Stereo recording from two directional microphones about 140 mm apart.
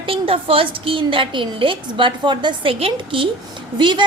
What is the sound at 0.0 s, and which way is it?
A woman's voice, 40° right (ahead or behind).